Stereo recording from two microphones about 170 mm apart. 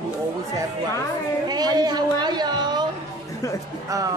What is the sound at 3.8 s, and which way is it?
Speech, 20° right (ahead or behind).